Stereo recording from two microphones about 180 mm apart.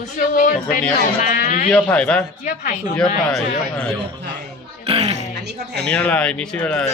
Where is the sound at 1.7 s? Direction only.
5° left (ahead or behind).